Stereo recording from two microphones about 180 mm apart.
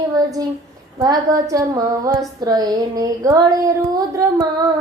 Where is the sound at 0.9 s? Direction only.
20° right (ahead or behind).